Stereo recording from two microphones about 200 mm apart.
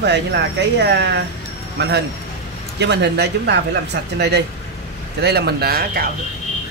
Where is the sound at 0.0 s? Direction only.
60° right (ahead or behind).